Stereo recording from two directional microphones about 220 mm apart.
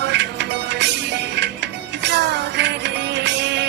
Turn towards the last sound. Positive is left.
turn(degrees=-55)  # may be behind; listen again after turning